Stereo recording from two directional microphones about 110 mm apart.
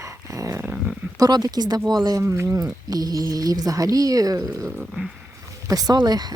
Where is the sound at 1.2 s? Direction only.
35° right (ahead or behind).